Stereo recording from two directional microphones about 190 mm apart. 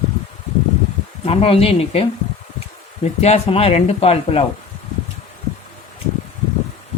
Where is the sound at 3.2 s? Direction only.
30° left (ahead or behind).